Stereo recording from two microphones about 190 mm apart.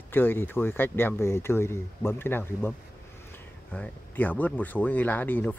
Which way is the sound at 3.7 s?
10° left (ahead or behind).